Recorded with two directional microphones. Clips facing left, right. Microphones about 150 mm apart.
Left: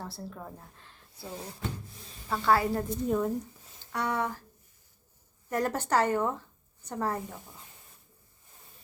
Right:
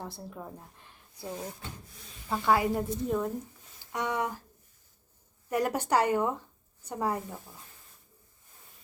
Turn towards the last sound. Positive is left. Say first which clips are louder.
# right 1 dB
turn(degrees=-15)  # may be behind; listen again after turning